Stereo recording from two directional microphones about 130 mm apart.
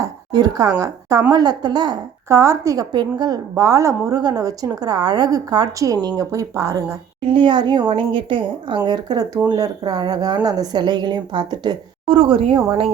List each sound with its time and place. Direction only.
0.0 s a woman's voice: 30° right (ahead or behind)
7.3 s speech: 35° right (ahead or behind)